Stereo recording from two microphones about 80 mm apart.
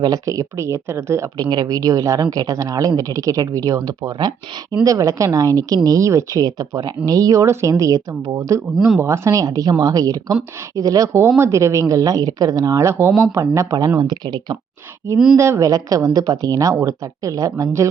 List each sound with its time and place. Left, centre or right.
0.0 s speech: right
1.4 s speech: right
4.8 s speech: right
6.4 s speech: right
14.0 s speech: right
15.1 s speech: right